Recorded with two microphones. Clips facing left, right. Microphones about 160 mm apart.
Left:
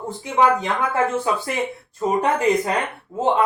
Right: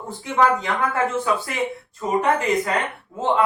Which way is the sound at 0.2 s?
20° left (ahead or behind).